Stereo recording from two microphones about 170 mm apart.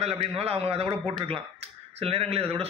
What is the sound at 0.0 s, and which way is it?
A man's voice, 35° right (ahead or behind).